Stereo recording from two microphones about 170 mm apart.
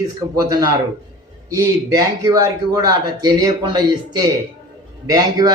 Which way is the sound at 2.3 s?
20° right (ahead or behind).